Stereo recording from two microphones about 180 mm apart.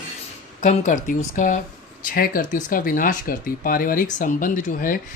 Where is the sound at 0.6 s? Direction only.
40° left (ahead or behind).